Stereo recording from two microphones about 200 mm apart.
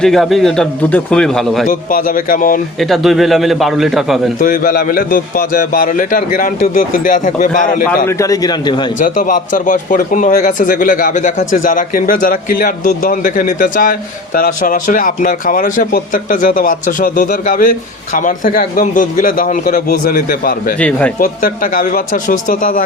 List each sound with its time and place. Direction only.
0.0 s a man's voice: centre (ahead or behind)
1.6 s a man's voice: 45° left (ahead or behind)
2.7 s a man's voice: centre (ahead or behind)
4.4 s a man's voice: 45° left (ahead or behind)
8.0 s a man's voice: 15° left (ahead or behind)
9.0 s a man's voice: 40° left (ahead or behind)
20.7 s a man's voice: 5° left (ahead or behind)
21.2 s a man's voice: 45° left (ahead or behind)